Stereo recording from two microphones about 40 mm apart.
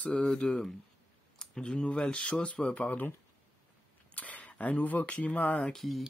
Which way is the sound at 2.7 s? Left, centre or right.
Left.